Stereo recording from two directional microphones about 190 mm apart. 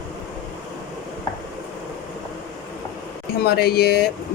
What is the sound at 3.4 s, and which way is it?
Speech, 55° left (ahead or behind).